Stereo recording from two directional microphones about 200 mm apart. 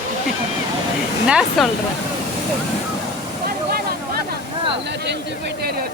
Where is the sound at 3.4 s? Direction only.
50° right (ahead or behind).